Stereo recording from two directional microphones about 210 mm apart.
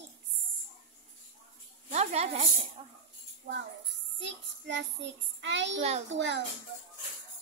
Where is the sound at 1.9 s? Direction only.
30° right (ahead or behind).